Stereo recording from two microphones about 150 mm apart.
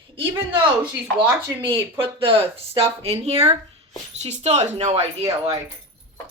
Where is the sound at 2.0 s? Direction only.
35° right (ahead or behind).